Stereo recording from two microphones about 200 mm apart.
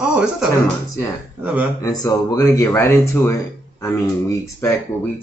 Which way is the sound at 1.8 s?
20° left (ahead or behind).